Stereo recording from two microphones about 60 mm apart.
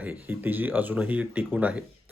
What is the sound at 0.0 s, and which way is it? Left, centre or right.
Speech, right.